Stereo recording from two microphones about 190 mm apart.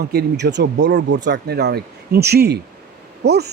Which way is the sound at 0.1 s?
60° right (ahead or behind).